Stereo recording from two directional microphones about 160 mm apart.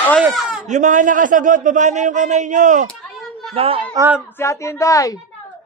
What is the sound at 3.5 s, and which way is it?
Speech, 35° right (ahead or behind).